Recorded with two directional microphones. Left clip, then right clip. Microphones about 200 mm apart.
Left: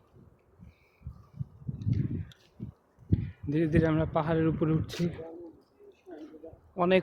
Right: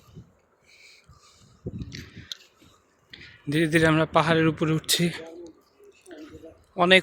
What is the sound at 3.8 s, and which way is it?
Speech, 15° right (ahead or behind).